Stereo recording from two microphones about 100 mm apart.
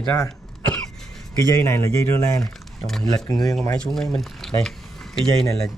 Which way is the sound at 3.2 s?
40° left (ahead or behind).